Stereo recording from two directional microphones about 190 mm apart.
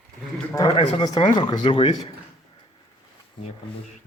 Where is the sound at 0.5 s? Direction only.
20° left (ahead or behind).